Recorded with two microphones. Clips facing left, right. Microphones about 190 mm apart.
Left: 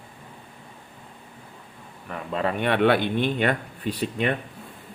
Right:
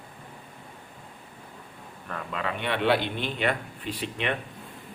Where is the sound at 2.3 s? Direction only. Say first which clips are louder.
Left 7 dB; 40° left (ahead or behind).